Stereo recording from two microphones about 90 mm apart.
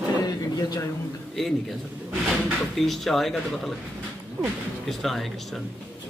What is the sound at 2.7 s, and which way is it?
Speech, centre (ahead or behind).